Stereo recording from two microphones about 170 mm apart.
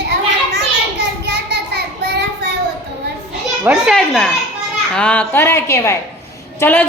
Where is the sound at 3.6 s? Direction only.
10° right (ahead or behind).